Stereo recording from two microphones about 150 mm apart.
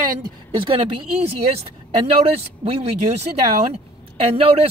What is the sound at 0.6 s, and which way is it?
Speech, 35° right (ahead or behind).